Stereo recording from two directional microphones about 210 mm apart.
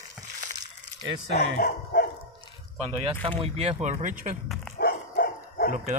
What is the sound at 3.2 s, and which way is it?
Speech, 25° right (ahead or behind).